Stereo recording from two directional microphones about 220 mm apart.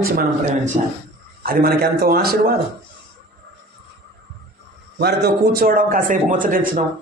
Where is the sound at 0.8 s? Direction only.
30° right (ahead or behind).